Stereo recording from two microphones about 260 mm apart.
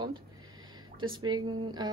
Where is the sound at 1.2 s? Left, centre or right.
Centre.